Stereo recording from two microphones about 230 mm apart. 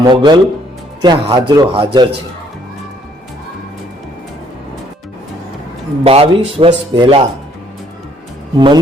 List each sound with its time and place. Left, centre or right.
0.0 s speech: centre
6.1 s speech: right
8.5 s speech: centre